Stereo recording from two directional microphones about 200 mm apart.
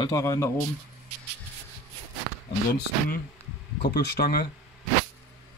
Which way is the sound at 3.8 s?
55° left (ahead or behind).